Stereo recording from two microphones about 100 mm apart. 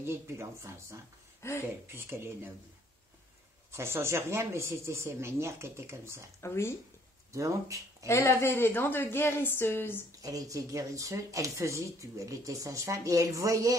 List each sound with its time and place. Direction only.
0.0 s speech: 25° right (ahead or behind)
1.4 s a woman's voice: 25° left (ahead or behind)
1.9 s speech: 25° right (ahead or behind)
3.7 s speech: 25° right (ahead or behind)
6.4 s a woman's voice: 25° left (ahead or behind)
7.3 s speech: 35° right (ahead or behind)
8.1 s a woman's voice: 30° left (ahead or behind)
10.2 s speech: 35° right (ahead or behind)